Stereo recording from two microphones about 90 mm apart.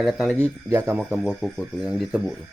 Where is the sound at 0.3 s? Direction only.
25° right (ahead or behind).